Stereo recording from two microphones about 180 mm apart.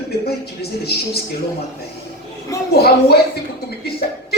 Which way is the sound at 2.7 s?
60° left (ahead or behind).